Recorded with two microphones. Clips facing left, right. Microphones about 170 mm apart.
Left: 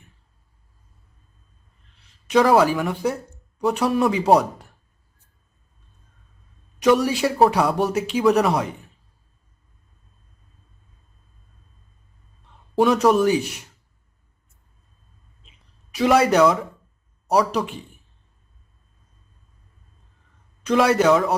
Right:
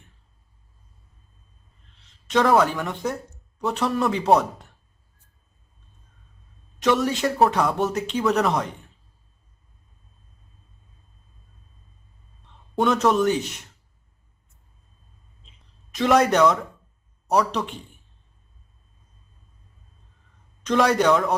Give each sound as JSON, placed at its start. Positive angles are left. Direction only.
{"t": 2.3, "sound": "speech", "side_deg": 5}
{"t": 6.8, "sound": "speech", "side_deg": 10}
{"t": 12.8, "sound": "speech", "side_deg": 10}
{"t": 15.4, "sound": "a sound", "side_deg": 10}
{"t": 17.2, "sound": "speech", "side_deg": 10}
{"t": 20.7, "sound": "speech", "side_deg": 5}